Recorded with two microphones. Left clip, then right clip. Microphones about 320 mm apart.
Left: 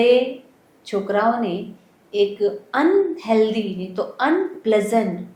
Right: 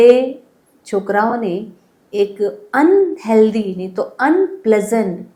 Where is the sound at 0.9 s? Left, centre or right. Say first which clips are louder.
Right 3 dB; right.